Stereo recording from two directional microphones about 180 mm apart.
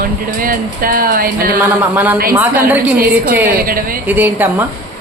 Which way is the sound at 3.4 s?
55° right (ahead or behind).